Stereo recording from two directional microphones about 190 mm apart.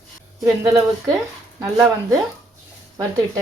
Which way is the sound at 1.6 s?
15° right (ahead or behind).